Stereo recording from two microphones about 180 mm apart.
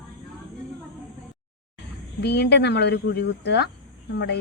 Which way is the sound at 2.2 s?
70° left (ahead or behind).